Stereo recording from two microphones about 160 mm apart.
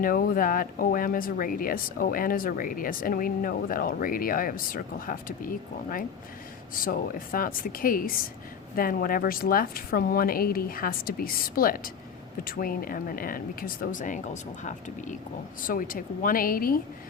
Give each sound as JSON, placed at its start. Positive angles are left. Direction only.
{"t": 0.0, "sound": "speech", "side_deg": 60}
{"t": 6.7, "sound": "speech", "side_deg": 60}